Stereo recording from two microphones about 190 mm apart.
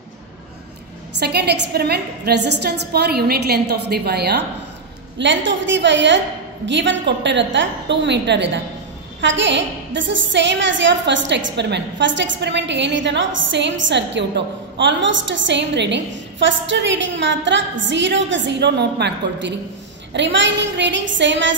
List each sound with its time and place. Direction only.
1.1 s a woman's voice: 60° right (ahead or behind)
5.2 s a woman's voice: 70° right (ahead or behind)